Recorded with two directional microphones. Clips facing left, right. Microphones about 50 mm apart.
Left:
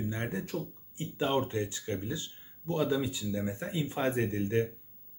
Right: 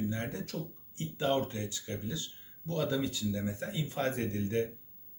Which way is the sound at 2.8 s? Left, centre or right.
Centre.